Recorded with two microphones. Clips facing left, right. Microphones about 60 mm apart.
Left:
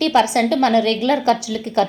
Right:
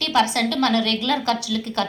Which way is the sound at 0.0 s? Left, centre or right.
Left.